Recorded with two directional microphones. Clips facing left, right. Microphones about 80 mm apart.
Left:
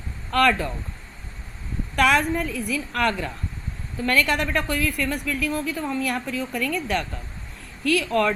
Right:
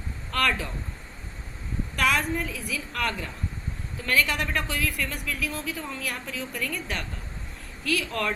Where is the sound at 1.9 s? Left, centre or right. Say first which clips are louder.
Left 5 dB; left.